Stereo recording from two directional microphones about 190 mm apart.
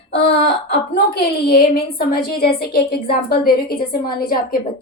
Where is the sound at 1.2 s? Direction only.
55° left (ahead or behind).